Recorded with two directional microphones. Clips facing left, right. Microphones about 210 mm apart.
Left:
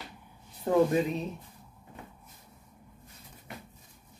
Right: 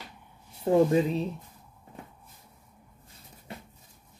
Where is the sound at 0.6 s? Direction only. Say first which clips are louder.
Right 3 dB; 25° right (ahead or behind).